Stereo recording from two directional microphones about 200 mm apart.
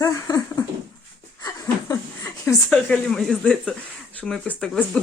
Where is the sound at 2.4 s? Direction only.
5° left (ahead or behind).